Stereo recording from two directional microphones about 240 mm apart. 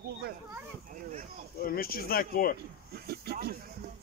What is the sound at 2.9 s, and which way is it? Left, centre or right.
Speech, right.